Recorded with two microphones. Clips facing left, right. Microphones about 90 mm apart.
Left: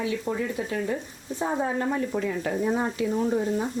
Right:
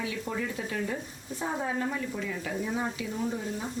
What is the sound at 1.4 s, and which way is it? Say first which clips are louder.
A woman's voice: left 5 dB; 40° left (ahead or behind).